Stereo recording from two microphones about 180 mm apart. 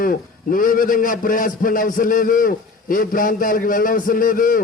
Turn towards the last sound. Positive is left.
turn(degrees=50)  # may be behind; listen again after turning